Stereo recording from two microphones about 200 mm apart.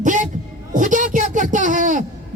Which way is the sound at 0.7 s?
40° right (ahead or behind).